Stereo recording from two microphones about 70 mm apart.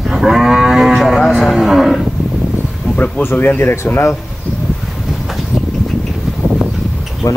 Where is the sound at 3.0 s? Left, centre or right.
Left.